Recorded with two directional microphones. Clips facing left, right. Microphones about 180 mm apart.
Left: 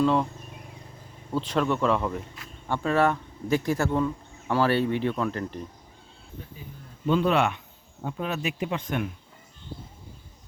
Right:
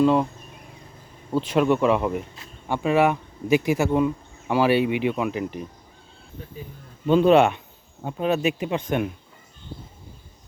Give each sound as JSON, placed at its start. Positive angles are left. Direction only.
{"t": 0.0, "sound": "speech", "side_deg": -5}
{"t": 1.4, "sound": "speech", "side_deg": -5}
{"t": 7.1, "sound": "speech", "side_deg": -25}